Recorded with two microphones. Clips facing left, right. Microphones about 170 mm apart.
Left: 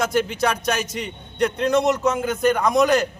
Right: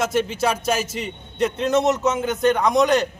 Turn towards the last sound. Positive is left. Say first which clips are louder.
# even
turn(degrees=0)  # may be behind; listen again after turning